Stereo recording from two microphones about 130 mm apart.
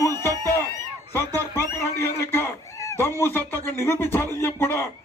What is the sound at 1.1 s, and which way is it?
A man's voice, 20° left (ahead or behind).